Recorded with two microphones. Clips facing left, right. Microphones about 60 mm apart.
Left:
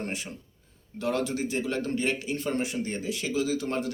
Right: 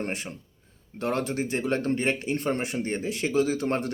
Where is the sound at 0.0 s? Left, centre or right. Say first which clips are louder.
Right 2 dB; right.